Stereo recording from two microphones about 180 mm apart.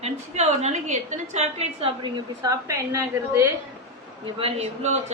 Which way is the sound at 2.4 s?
20° right (ahead or behind).